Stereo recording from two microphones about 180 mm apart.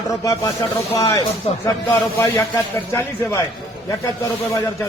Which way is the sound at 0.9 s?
15° left (ahead or behind).